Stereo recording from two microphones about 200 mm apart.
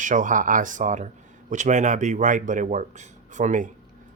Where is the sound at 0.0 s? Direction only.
40° right (ahead or behind).